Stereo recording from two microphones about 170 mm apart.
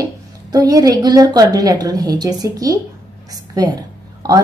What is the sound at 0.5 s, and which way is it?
A woman's voice, 20° right (ahead or behind).